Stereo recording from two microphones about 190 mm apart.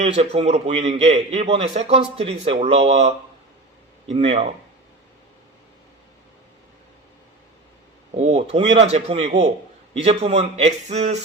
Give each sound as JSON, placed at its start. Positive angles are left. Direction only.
{"t": 0.0, "sound": "a man's voice", "side_deg": -35}
{"t": 4.1, "sound": "a man's voice", "side_deg": -35}
{"t": 8.1, "sound": "a man's voice", "side_deg": -35}